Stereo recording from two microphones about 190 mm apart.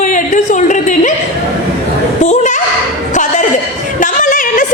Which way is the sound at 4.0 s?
45° left (ahead or behind).